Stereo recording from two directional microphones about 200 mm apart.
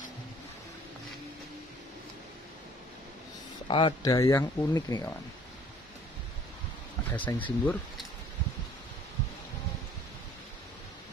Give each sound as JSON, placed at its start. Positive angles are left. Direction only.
{"t": 3.6, "sound": "speech", "side_deg": 25}
{"t": 7.1, "sound": "speech", "side_deg": 10}